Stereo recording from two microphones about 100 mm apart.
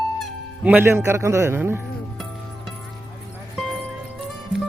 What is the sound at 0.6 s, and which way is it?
A man's voice, 15° right (ahead or behind).